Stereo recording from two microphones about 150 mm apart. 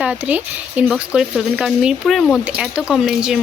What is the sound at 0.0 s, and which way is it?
Speech, 10° right (ahead or behind).